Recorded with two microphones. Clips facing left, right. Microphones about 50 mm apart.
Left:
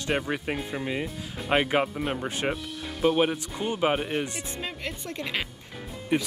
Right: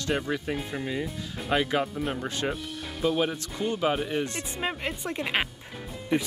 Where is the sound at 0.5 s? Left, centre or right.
Centre.